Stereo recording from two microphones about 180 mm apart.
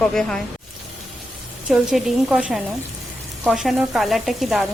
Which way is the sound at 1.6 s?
5° right (ahead or behind).